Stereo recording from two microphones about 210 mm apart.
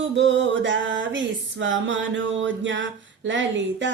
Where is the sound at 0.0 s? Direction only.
60° right (ahead or behind).